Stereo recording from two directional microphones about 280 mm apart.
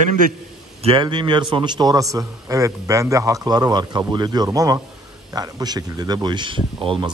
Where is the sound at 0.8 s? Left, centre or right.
Centre.